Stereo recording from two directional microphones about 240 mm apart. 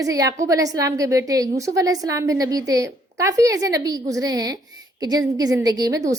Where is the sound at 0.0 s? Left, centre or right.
Centre.